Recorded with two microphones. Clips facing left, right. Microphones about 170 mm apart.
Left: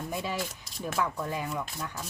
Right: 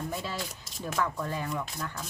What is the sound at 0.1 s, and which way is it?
A woman's voice, 15° left (ahead or behind).